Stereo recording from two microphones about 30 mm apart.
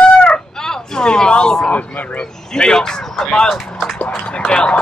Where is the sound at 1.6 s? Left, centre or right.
Left.